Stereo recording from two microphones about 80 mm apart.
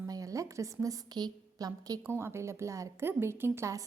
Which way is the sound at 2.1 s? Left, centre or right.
Right.